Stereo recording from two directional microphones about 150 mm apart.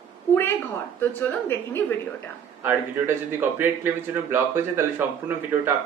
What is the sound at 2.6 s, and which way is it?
A man's voice, 15° right (ahead or behind).